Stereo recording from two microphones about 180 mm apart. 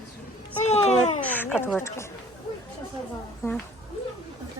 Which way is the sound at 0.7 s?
40° left (ahead or behind).